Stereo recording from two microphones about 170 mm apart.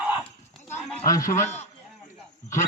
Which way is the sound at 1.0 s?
20° left (ahead or behind).